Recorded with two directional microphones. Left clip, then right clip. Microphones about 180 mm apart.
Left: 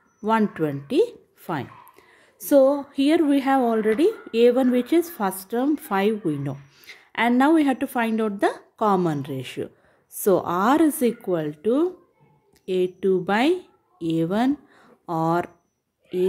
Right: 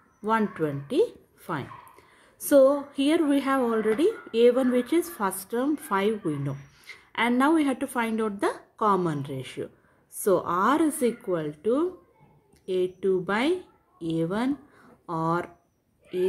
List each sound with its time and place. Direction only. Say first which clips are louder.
0.2 s speech: left 3 dB; 30° left (ahead or behind)